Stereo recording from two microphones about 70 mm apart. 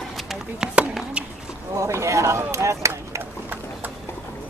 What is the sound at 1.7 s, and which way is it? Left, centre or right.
Speech, right.